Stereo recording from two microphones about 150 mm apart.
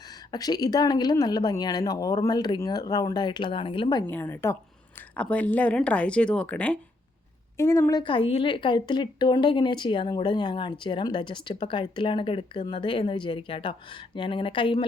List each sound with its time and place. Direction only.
0.3 s speech: 25° left (ahead or behind)
4.0 s speech: 15° left (ahead or behind)
7.5 s speech: 20° left (ahead or behind)
8.0 s a woman's voice: 35° left (ahead or behind)